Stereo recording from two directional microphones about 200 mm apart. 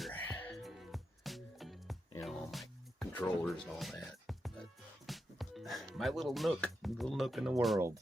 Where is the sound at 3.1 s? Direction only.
10° left (ahead or behind).